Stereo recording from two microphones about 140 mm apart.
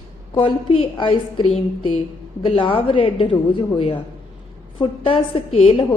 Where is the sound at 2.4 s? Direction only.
40° left (ahead or behind).